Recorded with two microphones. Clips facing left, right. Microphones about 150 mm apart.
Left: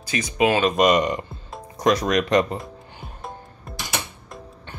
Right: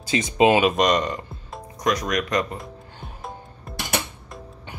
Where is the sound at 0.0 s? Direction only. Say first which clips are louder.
Right 3 dB; 25° right (ahead or behind).